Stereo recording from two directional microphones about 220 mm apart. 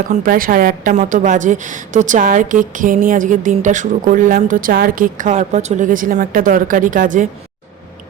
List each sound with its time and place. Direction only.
0.1 s a woman's voice: 40° right (ahead or behind)